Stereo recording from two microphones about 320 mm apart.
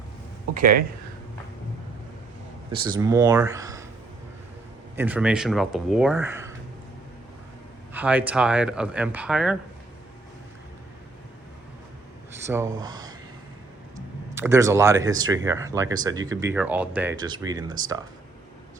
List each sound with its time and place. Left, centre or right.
0.6 s speech: right
2.8 s speech: centre
4.9 s speech: centre
7.9 s speech: centre
12.5 s speech: centre
14.3 s speech: centre